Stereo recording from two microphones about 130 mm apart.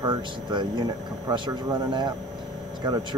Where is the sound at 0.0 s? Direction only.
35° right (ahead or behind).